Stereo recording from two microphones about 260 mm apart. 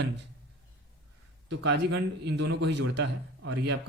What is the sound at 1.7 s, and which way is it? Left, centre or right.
A man's voice, right.